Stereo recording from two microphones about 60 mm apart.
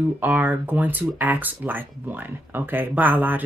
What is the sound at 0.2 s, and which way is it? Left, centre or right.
Speech, right.